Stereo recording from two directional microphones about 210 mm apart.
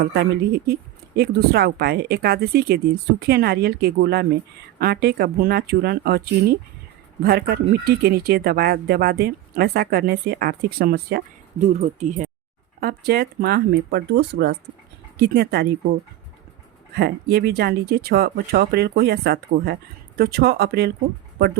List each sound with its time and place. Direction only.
0.0 s speech: 50° right (ahead or behind)
11.6 s speech: 35° right (ahead or behind)
12.8 s speech: 50° right (ahead or behind)
16.9 s speech: 50° right (ahead or behind)